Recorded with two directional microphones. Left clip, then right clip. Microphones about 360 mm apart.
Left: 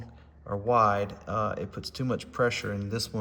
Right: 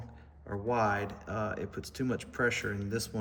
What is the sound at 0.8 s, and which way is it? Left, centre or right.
Speech, centre.